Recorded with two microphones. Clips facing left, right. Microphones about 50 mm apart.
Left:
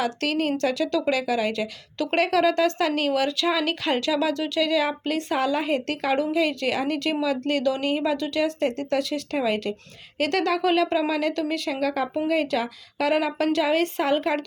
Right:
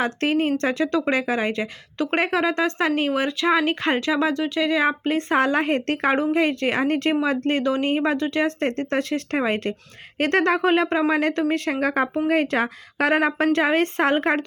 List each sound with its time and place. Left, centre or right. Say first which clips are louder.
0.0 s a woman's voice: right 3 dB; right
5.4 s a woman's voice: right 2 dB; right